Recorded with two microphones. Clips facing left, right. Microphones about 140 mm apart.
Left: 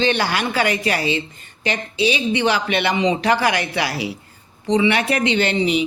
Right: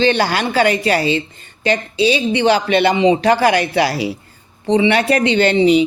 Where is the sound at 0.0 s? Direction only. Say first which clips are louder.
Right 4 dB; 30° right (ahead or behind).